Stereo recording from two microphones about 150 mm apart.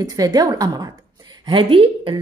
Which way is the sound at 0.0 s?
25° right (ahead or behind).